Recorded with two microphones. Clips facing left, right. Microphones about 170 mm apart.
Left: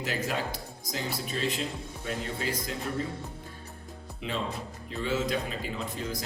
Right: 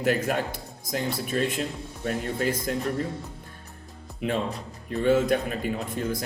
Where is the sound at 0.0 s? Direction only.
55° right (ahead or behind).